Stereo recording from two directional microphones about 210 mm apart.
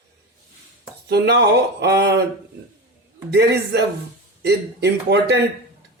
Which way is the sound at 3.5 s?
50° right (ahead or behind).